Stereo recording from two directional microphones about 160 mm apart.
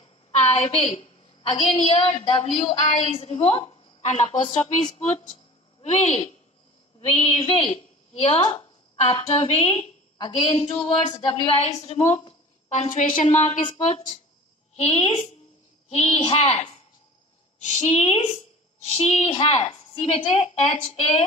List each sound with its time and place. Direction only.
0.0 s a woman's voice: 40° left (ahead or behind)
5.8 s a woman's voice: 40° left (ahead or behind)